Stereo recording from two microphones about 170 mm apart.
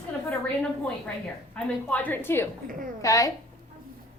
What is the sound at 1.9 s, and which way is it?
A woman's voice, 10° left (ahead or behind).